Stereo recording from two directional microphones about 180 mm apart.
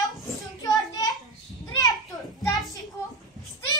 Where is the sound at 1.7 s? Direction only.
20° left (ahead or behind).